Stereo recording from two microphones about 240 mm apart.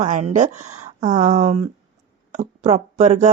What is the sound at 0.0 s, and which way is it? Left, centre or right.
Speech, right.